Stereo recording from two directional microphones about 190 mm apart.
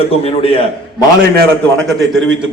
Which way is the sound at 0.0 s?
30° left (ahead or behind).